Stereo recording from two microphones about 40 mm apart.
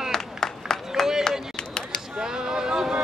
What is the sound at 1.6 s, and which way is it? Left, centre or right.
Chop, left.